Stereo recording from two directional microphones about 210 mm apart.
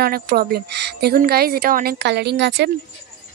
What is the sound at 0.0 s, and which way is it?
Speech, 45° right (ahead or behind).